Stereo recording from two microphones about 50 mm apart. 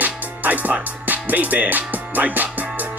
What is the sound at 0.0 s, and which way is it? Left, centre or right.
Music, right.